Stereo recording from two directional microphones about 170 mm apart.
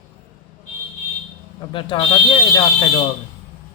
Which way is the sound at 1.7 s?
30° left (ahead or behind).